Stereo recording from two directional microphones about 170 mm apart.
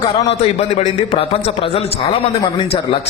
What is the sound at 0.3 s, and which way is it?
A man's voice, 40° left (ahead or behind).